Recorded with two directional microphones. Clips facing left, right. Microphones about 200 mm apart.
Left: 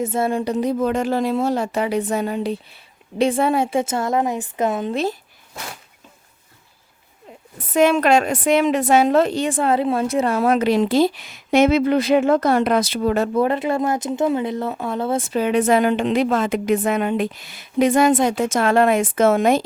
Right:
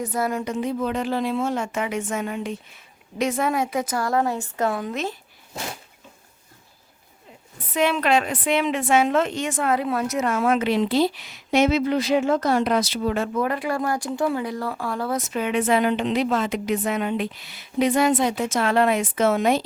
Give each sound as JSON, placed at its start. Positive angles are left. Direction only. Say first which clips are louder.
{"t": 0.0, "sound": "a woman's voice", "louder": "left 4 dB", "side_deg": 25}
{"t": 7.7, "sound": "a woman's voice", "louder": "left 5 dB", "side_deg": 45}